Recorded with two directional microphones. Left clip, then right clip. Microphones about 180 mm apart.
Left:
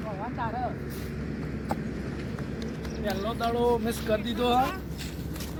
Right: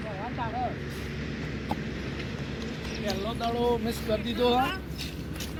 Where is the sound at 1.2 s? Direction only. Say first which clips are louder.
Right 1 dB; 75° left (ahead or behind).